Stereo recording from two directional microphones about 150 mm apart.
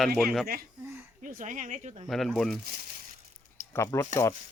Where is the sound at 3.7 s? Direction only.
20° left (ahead or behind).